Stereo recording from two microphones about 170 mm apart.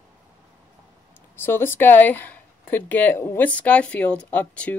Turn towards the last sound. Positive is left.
turn(degrees=5)  # may be behind; listen again after turning